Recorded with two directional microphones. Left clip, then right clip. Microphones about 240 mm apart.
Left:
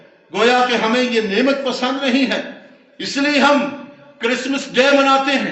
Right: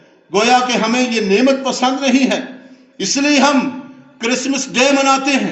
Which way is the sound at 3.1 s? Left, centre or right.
Right.